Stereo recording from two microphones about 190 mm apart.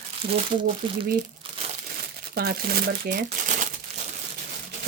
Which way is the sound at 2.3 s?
55° right (ahead or behind).